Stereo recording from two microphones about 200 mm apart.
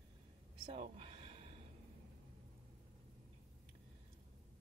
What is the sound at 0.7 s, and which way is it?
Speech, 30° right (ahead or behind).